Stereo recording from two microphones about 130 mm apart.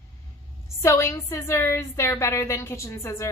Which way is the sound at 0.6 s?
20° left (ahead or behind).